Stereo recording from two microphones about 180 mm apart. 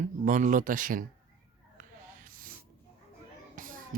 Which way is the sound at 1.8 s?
50° right (ahead or behind).